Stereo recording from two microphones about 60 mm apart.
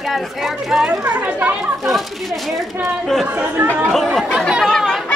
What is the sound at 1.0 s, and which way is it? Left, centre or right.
Speech, right.